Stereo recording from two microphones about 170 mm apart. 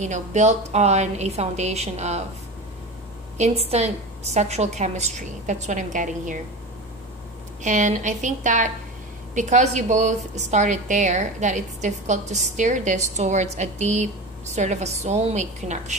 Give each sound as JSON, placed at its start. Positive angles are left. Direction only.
{"t": 0.0, "sound": "a woman's voice", "side_deg": -45}
{"t": 3.3, "sound": "a woman's voice", "side_deg": -40}
{"t": 7.6, "sound": "a woman's voice", "side_deg": -45}